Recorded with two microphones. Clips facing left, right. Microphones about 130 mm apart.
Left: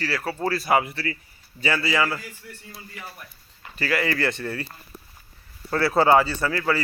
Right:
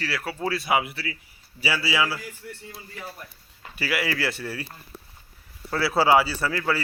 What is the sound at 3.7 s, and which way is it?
Speech, 10° right (ahead or behind).